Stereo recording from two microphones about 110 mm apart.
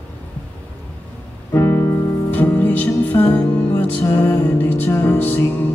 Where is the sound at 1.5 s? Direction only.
25° left (ahead or behind).